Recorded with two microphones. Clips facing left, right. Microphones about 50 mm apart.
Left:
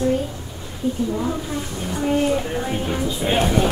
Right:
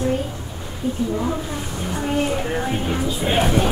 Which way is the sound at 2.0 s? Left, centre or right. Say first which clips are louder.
Left 3 dB; centre.